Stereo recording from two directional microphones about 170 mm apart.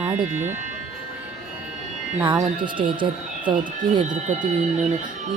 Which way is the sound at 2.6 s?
30° right (ahead or behind).